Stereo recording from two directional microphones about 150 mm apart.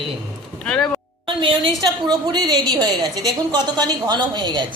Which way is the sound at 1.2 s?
35° right (ahead or behind).